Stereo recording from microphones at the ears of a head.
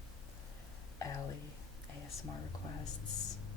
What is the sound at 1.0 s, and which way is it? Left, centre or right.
Speech, left.